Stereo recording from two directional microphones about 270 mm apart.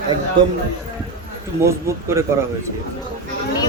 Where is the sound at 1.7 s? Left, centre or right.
Centre.